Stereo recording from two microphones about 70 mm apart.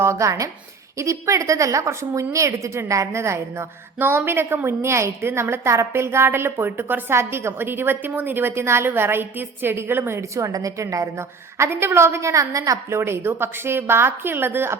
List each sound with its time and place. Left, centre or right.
0.0 s a woman's voice: right
11.5 s a woman's voice: right
12.9 s a woman's voice: right